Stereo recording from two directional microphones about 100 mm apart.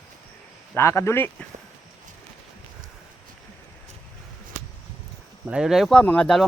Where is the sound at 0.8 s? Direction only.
30° left (ahead or behind).